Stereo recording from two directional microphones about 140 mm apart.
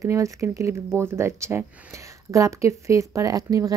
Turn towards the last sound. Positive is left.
turn(degrees=-25)  # may be behind; listen again after turning